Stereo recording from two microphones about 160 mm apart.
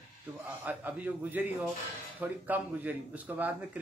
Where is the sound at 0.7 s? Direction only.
10° right (ahead or behind).